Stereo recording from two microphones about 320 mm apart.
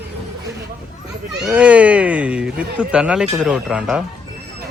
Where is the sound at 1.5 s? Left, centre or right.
Centre.